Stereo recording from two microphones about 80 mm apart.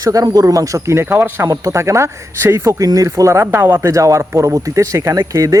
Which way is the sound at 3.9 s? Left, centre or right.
Right.